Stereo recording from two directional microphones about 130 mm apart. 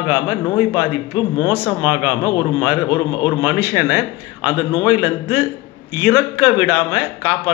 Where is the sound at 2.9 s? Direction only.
35° left (ahead or behind).